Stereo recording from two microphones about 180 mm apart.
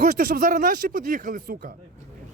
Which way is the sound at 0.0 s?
50° right (ahead or behind).